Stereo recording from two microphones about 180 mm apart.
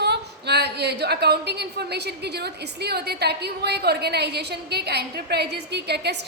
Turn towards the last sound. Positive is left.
turn(degrees=-65)  # may be behind; listen again after turning